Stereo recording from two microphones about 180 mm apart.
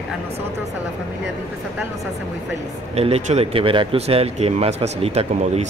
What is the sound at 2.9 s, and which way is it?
Speech, 35° right (ahead or behind).